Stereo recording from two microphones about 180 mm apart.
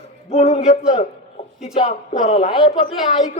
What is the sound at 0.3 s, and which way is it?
A man's voice, 35° left (ahead or behind).